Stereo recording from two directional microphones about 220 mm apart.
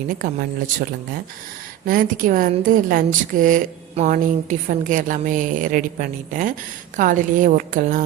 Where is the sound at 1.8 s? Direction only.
40° right (ahead or behind).